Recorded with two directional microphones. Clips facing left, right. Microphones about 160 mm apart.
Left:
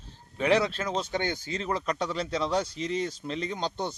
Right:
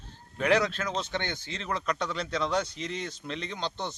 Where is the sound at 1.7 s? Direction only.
35° left (ahead or behind).